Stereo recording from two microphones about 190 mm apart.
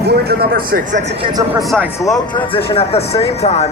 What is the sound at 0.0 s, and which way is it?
Speech, 55° right (ahead or behind).